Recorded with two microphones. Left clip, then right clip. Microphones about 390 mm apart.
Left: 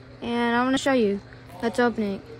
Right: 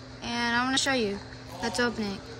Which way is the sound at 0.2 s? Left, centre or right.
Centre.